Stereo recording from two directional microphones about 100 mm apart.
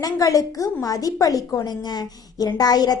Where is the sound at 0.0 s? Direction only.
40° left (ahead or behind).